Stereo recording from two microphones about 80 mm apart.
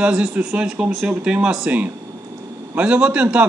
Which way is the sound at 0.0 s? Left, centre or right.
Centre.